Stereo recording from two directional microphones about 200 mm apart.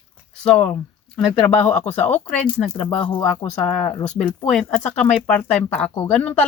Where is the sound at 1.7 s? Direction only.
35° left (ahead or behind).